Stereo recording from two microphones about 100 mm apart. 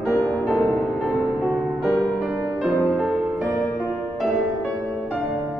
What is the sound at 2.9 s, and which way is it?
Music, 10° right (ahead or behind).